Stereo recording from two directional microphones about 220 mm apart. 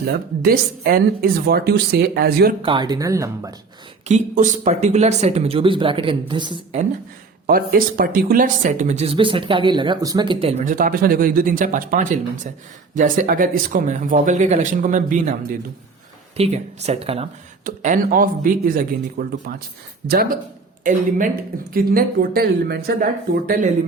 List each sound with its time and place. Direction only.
0.0 s speech: 45° right (ahead or behind)
2.6 s speech: 20° right (ahead or behind)
4.1 s speech: 35° right (ahead or behind)
7.4 s speech: 40° right (ahead or behind)
16.4 s speech: 30° right (ahead or behind)
17.6 s speech: 40° right (ahead or behind)